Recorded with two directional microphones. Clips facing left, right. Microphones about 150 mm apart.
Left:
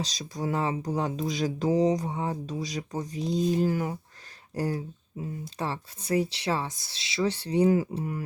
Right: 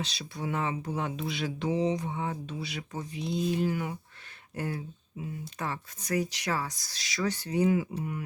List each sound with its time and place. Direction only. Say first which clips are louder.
0.0 s speech: left 3 dB; 40° left (ahead or behind)